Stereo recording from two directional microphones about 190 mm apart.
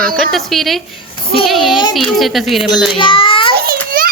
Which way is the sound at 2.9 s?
25° left (ahead or behind).